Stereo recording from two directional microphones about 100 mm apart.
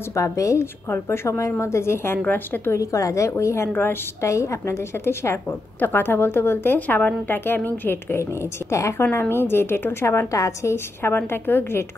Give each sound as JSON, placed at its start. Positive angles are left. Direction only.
{"t": 0.1, "sound": "a woman's voice", "side_deg": 30}
{"t": 2.8, "sound": "a woman's voice", "side_deg": 35}